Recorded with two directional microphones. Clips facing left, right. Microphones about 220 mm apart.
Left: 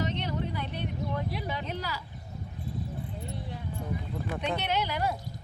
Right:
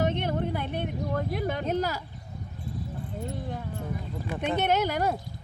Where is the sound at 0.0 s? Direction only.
50° right (ahead or behind).